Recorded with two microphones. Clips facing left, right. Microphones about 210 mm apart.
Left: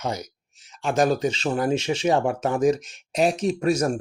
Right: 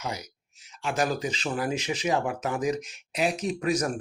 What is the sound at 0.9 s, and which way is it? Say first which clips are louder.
Speech: left 7 dB; 30° left (ahead or behind).